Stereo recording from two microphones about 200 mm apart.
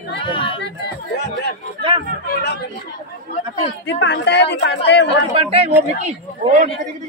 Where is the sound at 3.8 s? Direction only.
60° left (ahead or behind).